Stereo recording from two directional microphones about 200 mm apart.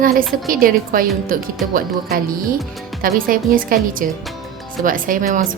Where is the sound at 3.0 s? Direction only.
45° right (ahead or behind).